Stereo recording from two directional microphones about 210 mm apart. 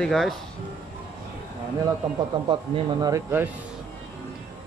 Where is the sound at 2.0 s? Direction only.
20° right (ahead or behind).